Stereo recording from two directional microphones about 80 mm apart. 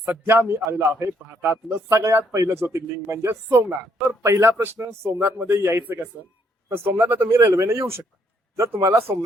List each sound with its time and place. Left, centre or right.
0.3 s a man's voice: right
1.9 s a man's voice: right